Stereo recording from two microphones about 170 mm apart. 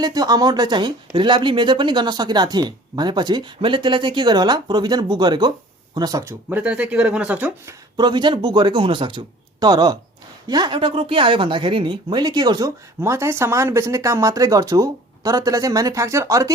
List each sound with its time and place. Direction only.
0.0 s speech: 20° right (ahead or behind)
7.9 s speech: 25° right (ahead or behind)